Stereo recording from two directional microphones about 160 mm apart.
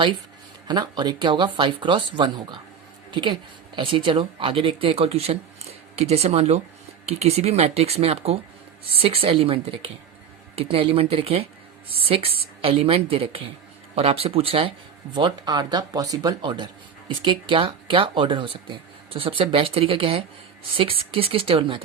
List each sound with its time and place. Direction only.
0.7 s speech: 25° right (ahead or behind)